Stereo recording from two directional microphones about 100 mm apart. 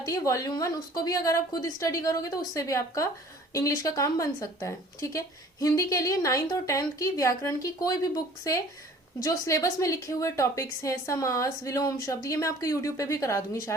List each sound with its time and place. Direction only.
0.0 s speech: 35° left (ahead or behind)